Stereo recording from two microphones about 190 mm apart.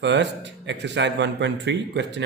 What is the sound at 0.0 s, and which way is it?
A man's voice, 65° right (ahead or behind).